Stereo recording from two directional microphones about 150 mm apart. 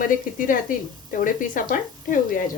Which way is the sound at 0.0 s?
60° left (ahead or behind).